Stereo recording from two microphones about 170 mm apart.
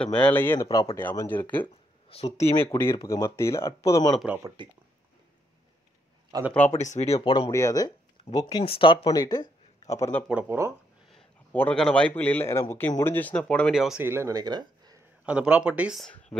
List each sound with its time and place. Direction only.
0.0 s a man's voice: 5° left (ahead or behind)
2.0 s speech: 35° left (ahead or behind)
2.3 s a man's voice: 15° left (ahead or behind)
4.2 s speech: 10° right (ahead or behind)
6.3 s speech: 25° right (ahead or behind)
6.7 s speech: 40° left (ahead or behind)
7.2 s a man's voice: 30° left (ahead or behind)
10.2 s speech: 10° right (ahead or behind)
11.1 s a man's voice: 5° left (ahead or behind)
14.0 s speech: 15° right (ahead or behind)
15.2 s speech: 5° right (ahead or behind)